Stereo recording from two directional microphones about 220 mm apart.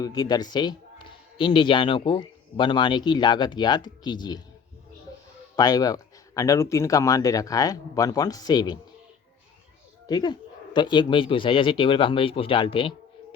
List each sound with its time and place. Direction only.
0.0 s speech: 15° left (ahead or behind)
5.5 s speech: 15° left (ahead or behind)
10.1 s speech: 20° left (ahead or behind)